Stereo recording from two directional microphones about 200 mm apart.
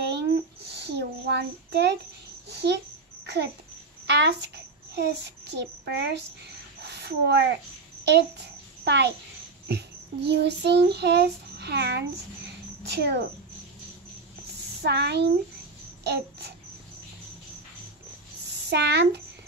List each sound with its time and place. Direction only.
0.1 s child singing: 55° right (ahead or behind)
2.4 s a child's voice: 60° right (ahead or behind)
4.1 s a child's voice: 60° right (ahead or behind)
6.8 s a sound: 55° right (ahead or behind)
8.0 s a child's voice: 60° right (ahead or behind)
9.7 s child singing: 60° right (ahead or behind)
12.8 s speech: 55° right (ahead or behind)
14.8 s a child's voice: 55° right (ahead or behind)
16.0 s babbling: 55° right (ahead or behind)
18.7 s a child's voice: 60° right (ahead or behind)